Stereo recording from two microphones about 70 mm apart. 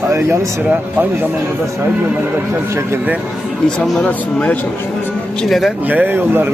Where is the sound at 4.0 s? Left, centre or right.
Centre.